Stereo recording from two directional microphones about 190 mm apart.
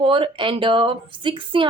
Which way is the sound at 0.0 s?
30° right (ahead or behind).